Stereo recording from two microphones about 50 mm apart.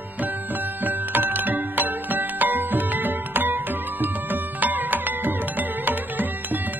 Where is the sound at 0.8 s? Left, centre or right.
Right.